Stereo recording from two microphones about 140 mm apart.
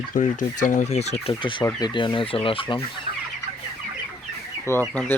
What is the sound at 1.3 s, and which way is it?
Speech, 35° left (ahead or behind).